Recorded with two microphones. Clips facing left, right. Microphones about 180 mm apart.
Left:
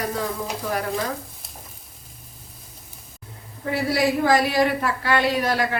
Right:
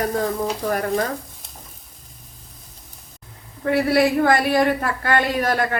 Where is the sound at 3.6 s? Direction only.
60° right (ahead or behind).